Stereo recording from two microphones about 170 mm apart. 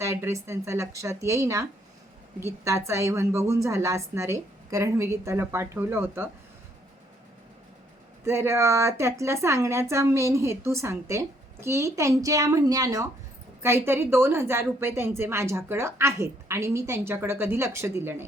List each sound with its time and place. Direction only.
0.0 s speech: 15° right (ahead or behind)
8.2 s speech: 15° right (ahead or behind)